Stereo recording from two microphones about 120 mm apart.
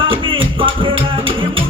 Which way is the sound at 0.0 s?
45° right (ahead or behind).